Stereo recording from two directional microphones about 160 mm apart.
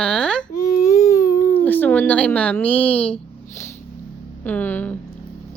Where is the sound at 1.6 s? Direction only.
10° left (ahead or behind).